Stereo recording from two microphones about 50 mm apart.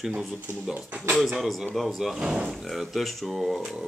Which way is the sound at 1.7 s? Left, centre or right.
Centre.